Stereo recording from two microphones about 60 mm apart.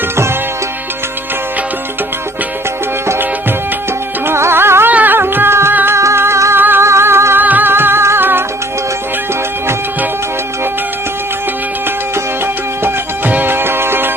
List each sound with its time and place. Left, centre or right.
4.3 s music: right
4.9 s music: right
6.0 s music: right
6.6 s music: right
6.8 s music: right
7.3 s music: right
12.8 s music: right